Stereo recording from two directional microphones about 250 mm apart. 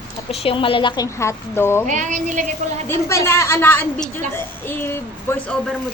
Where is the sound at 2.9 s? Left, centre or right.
Centre.